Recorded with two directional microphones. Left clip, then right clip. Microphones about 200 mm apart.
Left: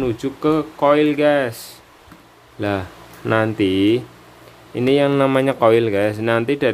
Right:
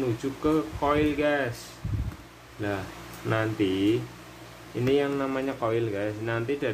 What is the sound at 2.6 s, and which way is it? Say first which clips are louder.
Speech: left 9 dB; 60° left (ahead or behind).